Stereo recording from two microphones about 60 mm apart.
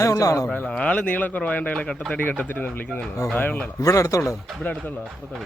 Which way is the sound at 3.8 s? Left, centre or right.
Left.